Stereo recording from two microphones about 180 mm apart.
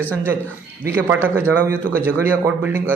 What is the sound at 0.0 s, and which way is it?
Speech, 10° left (ahead or behind).